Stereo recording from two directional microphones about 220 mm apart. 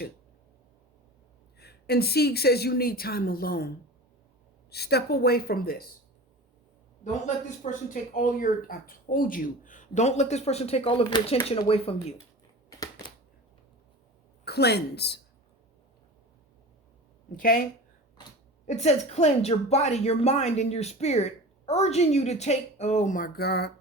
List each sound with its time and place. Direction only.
1.5 s speech: 45° left (ahead or behind)
4.7 s speech: 45° left (ahead or behind)
7.0 s a woman's voice: 35° left (ahead or behind)
14.4 s speech: 50° left (ahead or behind)
17.3 s speech: 40° left (ahead or behind)
18.6 s a woman's voice: 30° left (ahead or behind)